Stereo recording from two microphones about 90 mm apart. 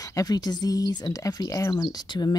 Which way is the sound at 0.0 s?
40° left (ahead or behind).